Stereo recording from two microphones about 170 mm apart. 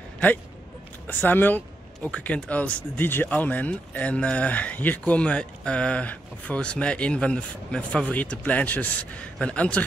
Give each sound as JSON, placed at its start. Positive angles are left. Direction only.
{"t": 1.0, "sound": "speech", "side_deg": 10}